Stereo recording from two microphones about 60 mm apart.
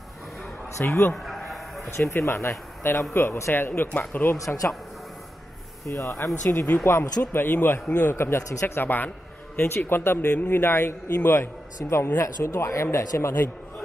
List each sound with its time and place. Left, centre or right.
0.7 s a man's voice: left
1.1 s a sound: centre
2.0 s speech: left
3.5 s a man's voice: left
4.5 s speech: left
5.9 s speech: left
6.5 s a man's voice: left
6.8 s a man's voice: left
9.6 s a man's voice: left